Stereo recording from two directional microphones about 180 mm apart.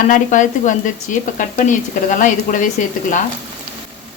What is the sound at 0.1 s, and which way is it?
Speech, 45° left (ahead or behind).